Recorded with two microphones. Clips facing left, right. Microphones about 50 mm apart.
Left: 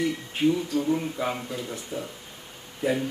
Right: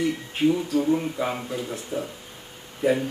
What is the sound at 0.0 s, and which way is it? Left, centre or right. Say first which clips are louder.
Speech: right 1 dB; centre.